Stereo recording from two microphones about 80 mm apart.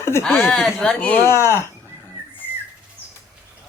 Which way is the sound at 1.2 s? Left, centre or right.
Left.